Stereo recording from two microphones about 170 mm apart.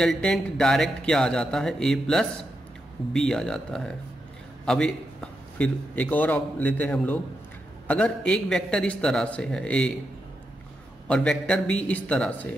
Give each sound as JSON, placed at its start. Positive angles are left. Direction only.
{"t": 0.0, "sound": "a man's voice", "side_deg": 5}
{"t": 11.1, "sound": "a man's voice", "side_deg": 5}